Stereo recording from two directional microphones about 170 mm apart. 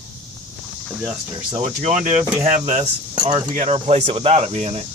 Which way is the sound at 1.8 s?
45° right (ahead or behind).